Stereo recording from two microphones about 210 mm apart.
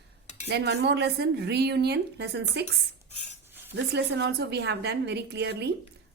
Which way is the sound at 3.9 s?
50° right (ahead or behind).